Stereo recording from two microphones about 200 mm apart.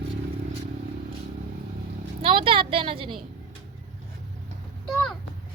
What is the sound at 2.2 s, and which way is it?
Speech, 25° right (ahead or behind).